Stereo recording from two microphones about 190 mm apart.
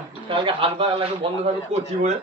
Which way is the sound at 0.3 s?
30° right (ahead or behind).